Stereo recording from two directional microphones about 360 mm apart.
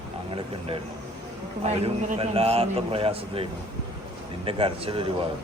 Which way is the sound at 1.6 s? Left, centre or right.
Centre.